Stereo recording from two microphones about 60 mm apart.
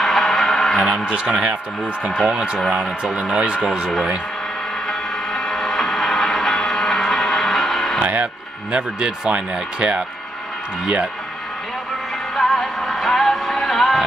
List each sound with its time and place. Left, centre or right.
0.0 s music: centre
0.8 s speech: centre
4.8 s music: centre
8.0 s speech: right
12.4 s music: centre